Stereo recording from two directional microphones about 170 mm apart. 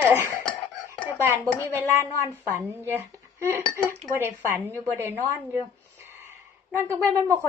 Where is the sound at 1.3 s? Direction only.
15° right (ahead or behind).